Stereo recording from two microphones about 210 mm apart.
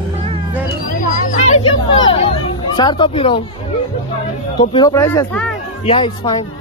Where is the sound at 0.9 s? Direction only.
35° left (ahead or behind).